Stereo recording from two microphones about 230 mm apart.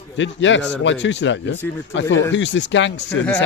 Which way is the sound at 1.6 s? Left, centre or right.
Centre.